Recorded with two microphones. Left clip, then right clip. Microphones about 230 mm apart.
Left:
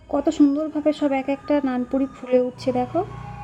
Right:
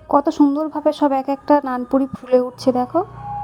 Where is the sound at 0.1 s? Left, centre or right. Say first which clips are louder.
Right 4 dB; right.